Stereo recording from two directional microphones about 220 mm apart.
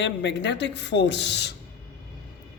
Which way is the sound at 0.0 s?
55° left (ahead or behind).